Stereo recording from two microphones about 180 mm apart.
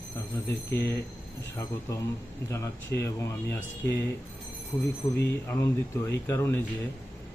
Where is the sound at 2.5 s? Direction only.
15° left (ahead or behind).